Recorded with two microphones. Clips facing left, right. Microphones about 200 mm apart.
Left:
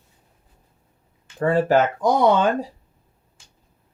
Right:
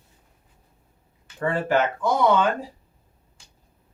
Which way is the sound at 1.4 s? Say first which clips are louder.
Left 5 dB; 35° left (ahead or behind).